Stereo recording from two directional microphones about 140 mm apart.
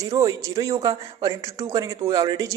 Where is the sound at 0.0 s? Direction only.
25° right (ahead or behind).